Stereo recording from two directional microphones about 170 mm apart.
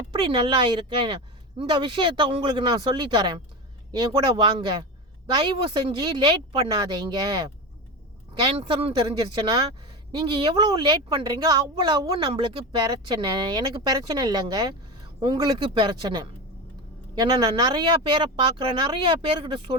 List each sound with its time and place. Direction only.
0.1 s a woman's voice: 30° right (ahead or behind)